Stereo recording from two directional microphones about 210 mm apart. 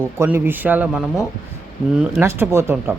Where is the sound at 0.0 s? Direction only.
10° right (ahead or behind).